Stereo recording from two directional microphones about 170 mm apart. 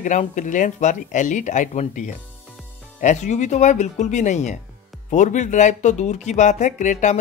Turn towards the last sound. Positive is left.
turn(degrees=45)  # may be behind; listen again after turning